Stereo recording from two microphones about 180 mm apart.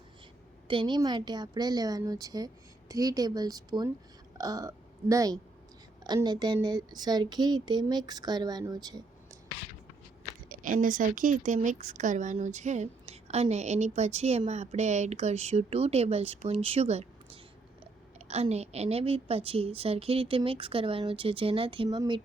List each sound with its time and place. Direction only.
0.7 s speech: 25° right (ahead or behind)
10.5 s a woman's voice: 45° right (ahead or behind); by 22.2 s 25° right (ahead or behind)